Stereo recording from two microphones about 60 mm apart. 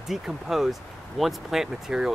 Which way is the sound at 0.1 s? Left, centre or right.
Centre.